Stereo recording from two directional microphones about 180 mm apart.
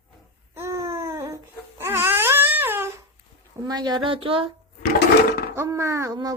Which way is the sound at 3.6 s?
25° right (ahead or behind).